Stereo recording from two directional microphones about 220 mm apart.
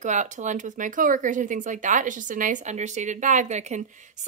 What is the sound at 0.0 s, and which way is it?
Speech, 35° right (ahead or behind).